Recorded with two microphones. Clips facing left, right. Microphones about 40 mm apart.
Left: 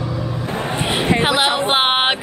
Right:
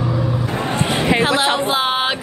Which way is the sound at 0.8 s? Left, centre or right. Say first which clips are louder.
Even; left.